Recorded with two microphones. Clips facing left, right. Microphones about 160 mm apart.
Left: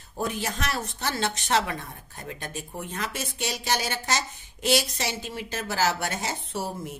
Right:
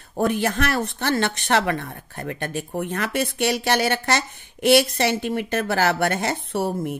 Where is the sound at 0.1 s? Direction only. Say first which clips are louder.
Right 8 dB; 60° right (ahead or behind).